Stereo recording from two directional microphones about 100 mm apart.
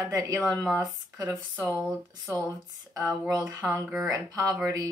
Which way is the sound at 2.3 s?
35° right (ahead or behind).